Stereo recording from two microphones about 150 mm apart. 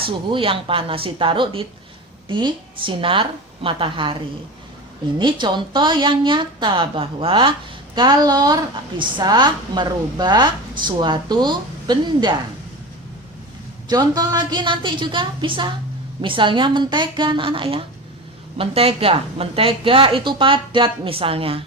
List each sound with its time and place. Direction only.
0.0 s a woman's voice: 35° right (ahead or behind)
5.2 s a woman's voice: 30° right (ahead or behind)
13.8 s a woman's voice: 25° right (ahead or behind)